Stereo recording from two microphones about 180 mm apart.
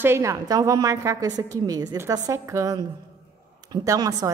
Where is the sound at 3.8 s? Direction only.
20° right (ahead or behind).